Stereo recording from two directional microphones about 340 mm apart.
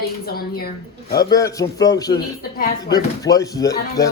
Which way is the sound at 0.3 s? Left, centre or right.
Left.